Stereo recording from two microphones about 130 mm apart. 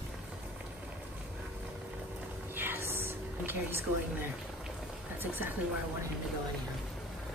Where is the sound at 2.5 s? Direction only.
15° right (ahead or behind).